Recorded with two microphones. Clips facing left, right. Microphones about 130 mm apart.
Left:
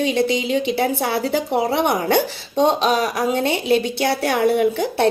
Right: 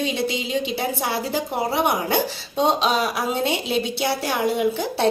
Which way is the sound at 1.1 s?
65° left (ahead or behind).